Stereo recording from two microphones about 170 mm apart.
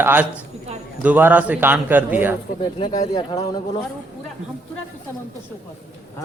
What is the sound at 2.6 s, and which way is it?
Speech, 25° left (ahead or behind).